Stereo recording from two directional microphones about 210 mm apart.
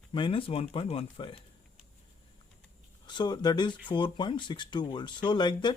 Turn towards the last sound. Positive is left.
turn(degrees=20)  # may be behind; listen again after turning